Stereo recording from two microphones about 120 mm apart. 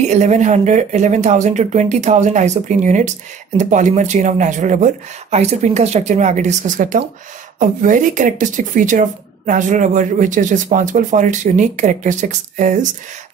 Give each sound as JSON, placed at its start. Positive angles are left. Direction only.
{"t": 0.1, "sound": "speech", "side_deg": -75}